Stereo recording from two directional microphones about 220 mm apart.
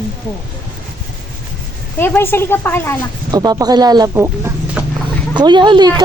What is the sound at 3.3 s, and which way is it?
Speech, 15° right (ahead or behind).